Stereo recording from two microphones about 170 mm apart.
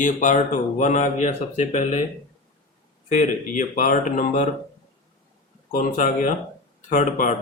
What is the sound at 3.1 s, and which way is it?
Speech, 50° left (ahead or behind).